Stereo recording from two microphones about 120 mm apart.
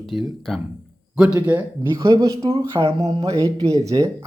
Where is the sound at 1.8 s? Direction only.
30° right (ahead or behind).